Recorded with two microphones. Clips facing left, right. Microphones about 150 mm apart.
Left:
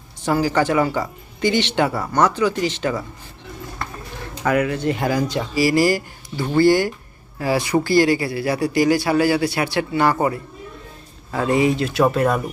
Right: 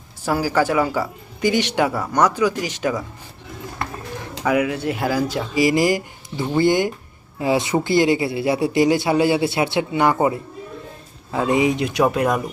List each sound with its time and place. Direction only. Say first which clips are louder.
0.3 s speech: left 1 dB; 5° right (ahead or behind)
4.4 s speech: left 1 dB; 10° right (ahead or behind)
5.5 s speech: even; 20° right (ahead or behind)